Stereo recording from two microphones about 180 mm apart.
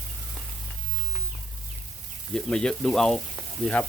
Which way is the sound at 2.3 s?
5° left (ahead or behind).